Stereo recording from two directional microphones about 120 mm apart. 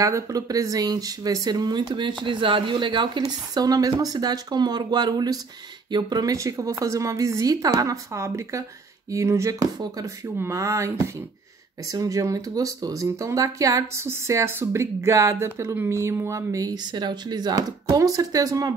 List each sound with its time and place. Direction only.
0.0 s speech: 30° right (ahead or behind)